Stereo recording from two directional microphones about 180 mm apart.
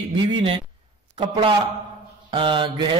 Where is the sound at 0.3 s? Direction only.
30° right (ahead or behind).